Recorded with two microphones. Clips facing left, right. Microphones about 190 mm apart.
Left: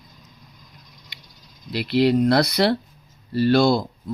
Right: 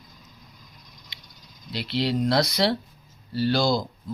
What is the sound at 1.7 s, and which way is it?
Speech, 55° left (ahead or behind).